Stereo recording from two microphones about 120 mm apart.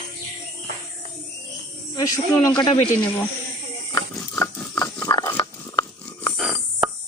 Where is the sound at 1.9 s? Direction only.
30° left (ahead or behind).